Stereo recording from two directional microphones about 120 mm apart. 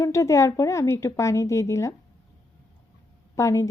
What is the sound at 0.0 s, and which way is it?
A woman's voice, 25° left (ahead or behind).